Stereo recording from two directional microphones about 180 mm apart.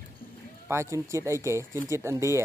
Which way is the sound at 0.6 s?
15° right (ahead or behind).